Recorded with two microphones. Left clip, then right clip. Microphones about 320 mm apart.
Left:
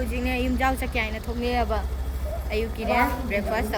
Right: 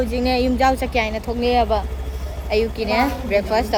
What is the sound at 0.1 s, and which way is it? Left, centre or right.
A woman's voice, centre.